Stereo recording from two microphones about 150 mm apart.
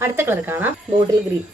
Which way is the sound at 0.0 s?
15° right (ahead or behind).